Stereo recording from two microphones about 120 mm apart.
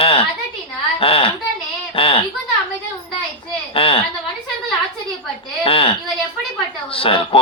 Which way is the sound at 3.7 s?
50° left (ahead or behind).